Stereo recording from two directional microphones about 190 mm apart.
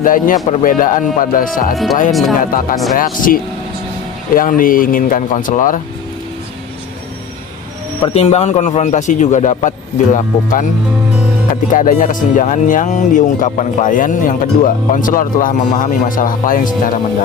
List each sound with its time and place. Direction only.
0.0 s speech: 45° left (ahead or behind)
1.7 s speech: centre (ahead or behind)
2.4 s speech: 45° left (ahead or behind)
8.1 s a man's voice: 35° left (ahead or behind)
11.7 s speech: 45° left (ahead or behind)